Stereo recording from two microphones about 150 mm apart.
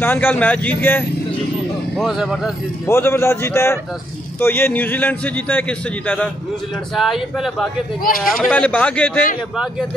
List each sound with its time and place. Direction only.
0.0 s a man's voice: 15° left (ahead or behind)
2.0 s speech: centre (ahead or behind)
2.9 s a man's voice: 15° left (ahead or behind)
7.0 s speech: centre (ahead or behind)
8.0 s a man's voice: 75° left (ahead or behind)
8.5 s a man's voice: 10° left (ahead or behind)